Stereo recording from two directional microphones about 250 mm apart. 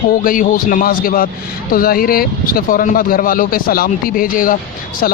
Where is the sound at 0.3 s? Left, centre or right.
Left.